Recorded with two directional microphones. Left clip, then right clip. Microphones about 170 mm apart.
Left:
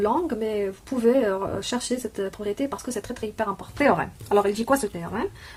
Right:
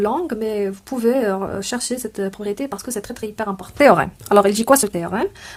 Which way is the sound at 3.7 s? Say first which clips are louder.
Right 9 dB; 60° right (ahead or behind).